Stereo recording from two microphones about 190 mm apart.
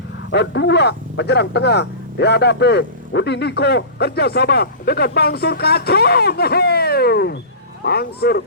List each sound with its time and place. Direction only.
0.3 s speech: 65° left (ahead or behind)